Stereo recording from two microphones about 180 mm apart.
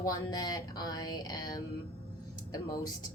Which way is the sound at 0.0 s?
20° left (ahead or behind).